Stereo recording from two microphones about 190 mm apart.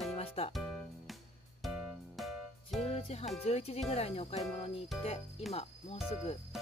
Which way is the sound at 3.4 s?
35° left (ahead or behind).